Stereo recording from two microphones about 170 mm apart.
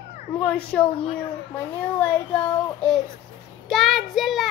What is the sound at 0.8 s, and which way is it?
Speech, 30° left (ahead or behind).